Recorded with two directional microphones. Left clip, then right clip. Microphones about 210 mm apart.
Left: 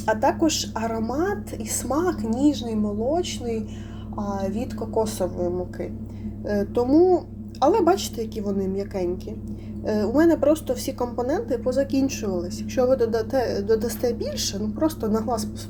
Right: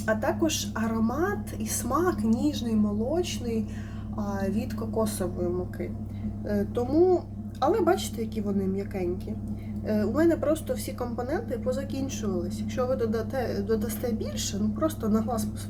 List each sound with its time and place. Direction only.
0.0 s a woman's voice: 15° left (ahead or behind)
6.5 s a woman's voice: 15° left (ahead or behind)